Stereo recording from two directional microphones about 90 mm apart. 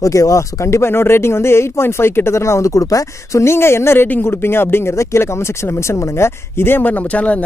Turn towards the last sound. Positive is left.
turn(degrees=15)  # may be behind; listen again after turning